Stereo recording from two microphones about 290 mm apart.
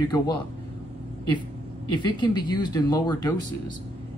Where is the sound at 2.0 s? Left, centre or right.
Centre.